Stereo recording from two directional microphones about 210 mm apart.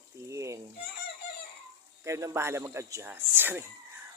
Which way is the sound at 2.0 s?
15° right (ahead or behind).